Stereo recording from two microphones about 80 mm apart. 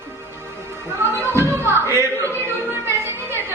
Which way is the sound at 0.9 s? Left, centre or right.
Right.